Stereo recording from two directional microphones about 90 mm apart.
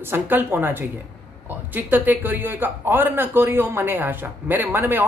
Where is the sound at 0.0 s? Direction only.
25° right (ahead or behind).